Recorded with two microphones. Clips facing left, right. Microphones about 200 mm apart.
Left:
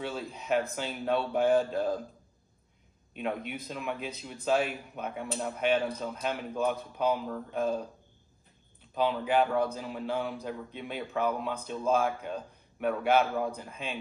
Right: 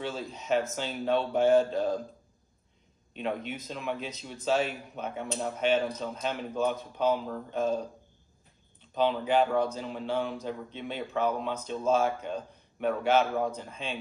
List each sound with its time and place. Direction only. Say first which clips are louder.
0.0 s a man's voice: right 1 dB; 5° left (ahead or behind)
3.2 s a man's voice: right 1 dB; 5° left (ahead or behind)
8.9 s a man's voice: right 1 dB; 5° left (ahead or behind)